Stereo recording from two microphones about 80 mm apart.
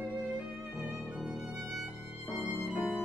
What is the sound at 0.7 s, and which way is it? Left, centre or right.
Music, centre.